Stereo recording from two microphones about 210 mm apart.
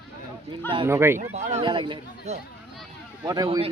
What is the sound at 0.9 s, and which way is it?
Speech, 10° right (ahead or behind).